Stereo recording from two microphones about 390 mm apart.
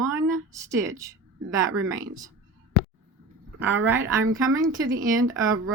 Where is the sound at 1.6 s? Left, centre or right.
Right.